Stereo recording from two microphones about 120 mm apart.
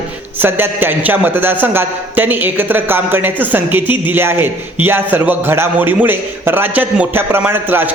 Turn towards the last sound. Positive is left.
turn(degrees=-15)  # may be behind; listen again after turning